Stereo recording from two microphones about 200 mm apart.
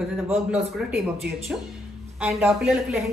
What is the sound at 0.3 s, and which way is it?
Speech, 5° right (ahead or behind).